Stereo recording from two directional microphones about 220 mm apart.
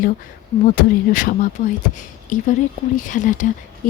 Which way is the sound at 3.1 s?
35° left (ahead or behind).